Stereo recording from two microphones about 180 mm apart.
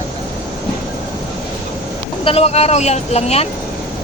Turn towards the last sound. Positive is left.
turn(degrees=35)  # may be behind; listen again after turning